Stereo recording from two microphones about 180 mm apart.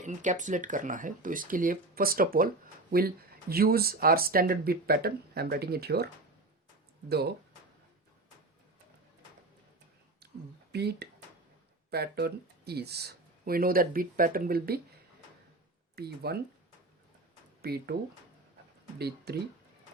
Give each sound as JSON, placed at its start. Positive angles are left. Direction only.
{"t": 0.0, "sound": "speech", "side_deg": -45}
{"t": 3.5, "sound": "speech", "side_deg": -55}
{"t": 7.1, "sound": "speech", "side_deg": -60}
{"t": 10.2, "sound": "a sound", "side_deg": -65}
{"t": 10.7, "sound": "speech", "side_deg": -65}
{"t": 16.0, "sound": "speech", "side_deg": -60}
{"t": 17.6, "sound": "speech", "side_deg": -60}
{"t": 18.9, "sound": "speech", "side_deg": -65}